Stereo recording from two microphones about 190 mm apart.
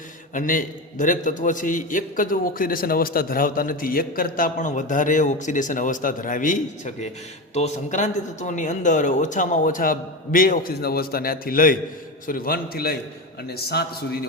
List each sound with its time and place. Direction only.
0.3 s a man's voice: 45° left (ahead or behind)